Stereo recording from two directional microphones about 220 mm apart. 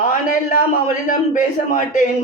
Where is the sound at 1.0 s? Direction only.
35° left (ahead or behind).